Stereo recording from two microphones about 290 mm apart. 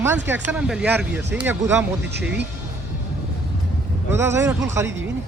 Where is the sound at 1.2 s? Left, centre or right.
Right.